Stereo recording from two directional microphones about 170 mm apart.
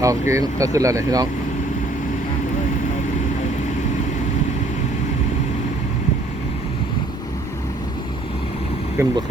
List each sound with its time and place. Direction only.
0.0 s speech: 20° right (ahead or behind)
9.0 s speech: 15° right (ahead or behind)